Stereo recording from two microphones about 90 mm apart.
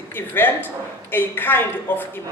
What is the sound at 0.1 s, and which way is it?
A man's voice, 25° left (ahead or behind).